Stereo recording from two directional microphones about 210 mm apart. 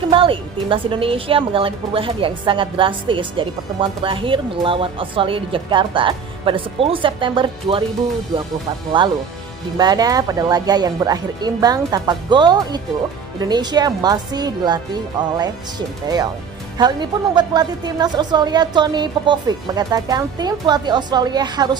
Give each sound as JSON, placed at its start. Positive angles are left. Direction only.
{"t": 0.1, "sound": "speech", "side_deg": -25}
{"t": 8.9, "sound": "speech", "side_deg": -25}
{"t": 16.0, "sound": "speech", "side_deg": -20}